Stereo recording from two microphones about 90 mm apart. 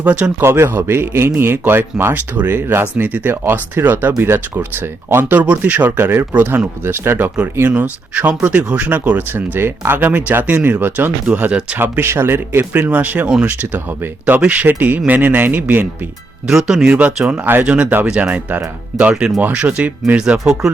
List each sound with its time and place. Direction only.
0.0 s speech: 15° right (ahead or behind)
16.5 s speech: 5° right (ahead or behind)
19.1 s speech: 5° right (ahead or behind)
19.4 s speech: 20° right (ahead or behind)